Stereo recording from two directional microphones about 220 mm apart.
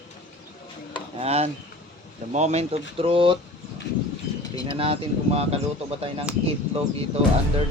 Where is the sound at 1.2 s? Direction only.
30° right (ahead or behind).